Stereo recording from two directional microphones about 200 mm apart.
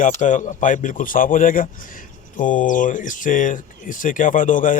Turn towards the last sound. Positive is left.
turn(degrees=40)  # may be behind; listen again after turning